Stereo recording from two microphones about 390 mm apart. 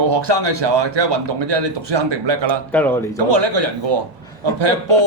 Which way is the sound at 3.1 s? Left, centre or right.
Right.